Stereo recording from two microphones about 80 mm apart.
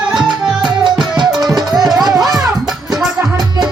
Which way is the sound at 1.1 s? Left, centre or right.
Right.